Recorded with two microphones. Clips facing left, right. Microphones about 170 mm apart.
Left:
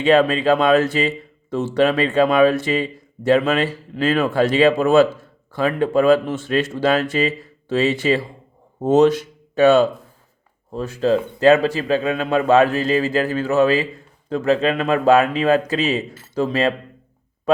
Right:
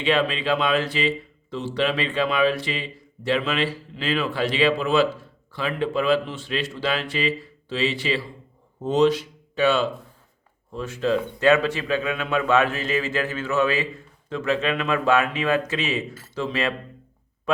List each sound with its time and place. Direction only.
0.0 s speech: 45° left (ahead or behind)